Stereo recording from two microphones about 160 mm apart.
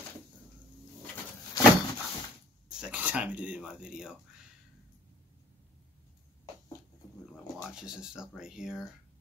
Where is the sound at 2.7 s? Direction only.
5° right (ahead or behind).